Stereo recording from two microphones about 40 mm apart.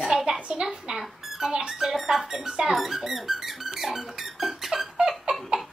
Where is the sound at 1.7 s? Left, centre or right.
Centre.